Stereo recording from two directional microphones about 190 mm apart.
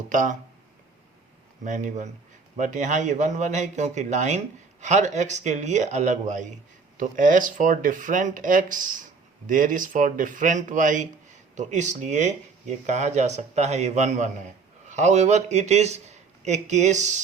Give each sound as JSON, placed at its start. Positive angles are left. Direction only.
{"t": 0.1, "sound": "speech", "side_deg": -40}
{"t": 1.6, "sound": "a man's voice", "side_deg": -40}